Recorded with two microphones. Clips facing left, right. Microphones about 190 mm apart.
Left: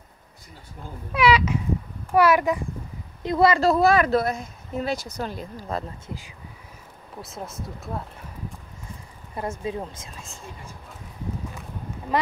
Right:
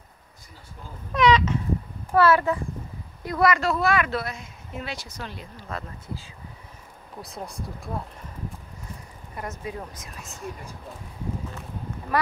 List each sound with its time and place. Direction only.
1.1 s speech: 10° left (ahead or behind)
3.3 s speech: 25° left (ahead or behind)
6.0 s speech: 15° left (ahead or behind)
7.2 s speech: centre (ahead or behind)
9.4 s speech: 25° left (ahead or behind)
12.1 s speech: 20° left (ahead or behind)